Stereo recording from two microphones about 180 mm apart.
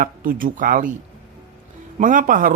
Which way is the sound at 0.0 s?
50° right (ahead or behind).